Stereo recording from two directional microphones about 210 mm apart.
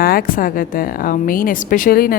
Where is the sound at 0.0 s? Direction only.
45° left (ahead or behind).